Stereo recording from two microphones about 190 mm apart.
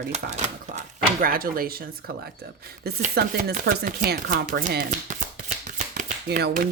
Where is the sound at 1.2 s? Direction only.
50° right (ahead or behind).